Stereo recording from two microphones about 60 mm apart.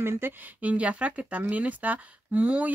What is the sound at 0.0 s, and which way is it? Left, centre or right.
Speech, right.